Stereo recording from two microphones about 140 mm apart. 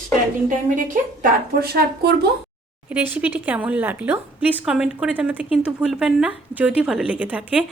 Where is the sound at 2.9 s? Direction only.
10° right (ahead or behind).